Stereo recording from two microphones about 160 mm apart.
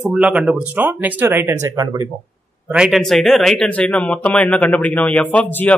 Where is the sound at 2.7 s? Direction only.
5° right (ahead or behind).